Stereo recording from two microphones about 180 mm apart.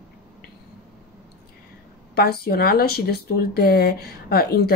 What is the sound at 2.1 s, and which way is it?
Speech, 60° left (ahead or behind).